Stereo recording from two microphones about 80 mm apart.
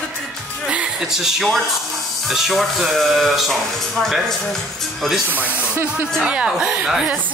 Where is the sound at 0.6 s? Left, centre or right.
Centre.